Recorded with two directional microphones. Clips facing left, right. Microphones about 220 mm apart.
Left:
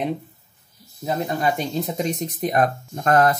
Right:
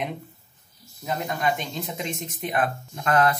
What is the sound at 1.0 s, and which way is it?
Speech, 35° left (ahead or behind).